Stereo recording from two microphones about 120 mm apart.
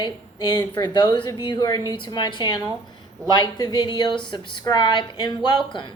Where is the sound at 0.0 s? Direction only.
35° left (ahead or behind).